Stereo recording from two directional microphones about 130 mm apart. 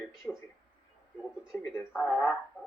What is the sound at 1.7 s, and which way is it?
Speech, 15° left (ahead or behind).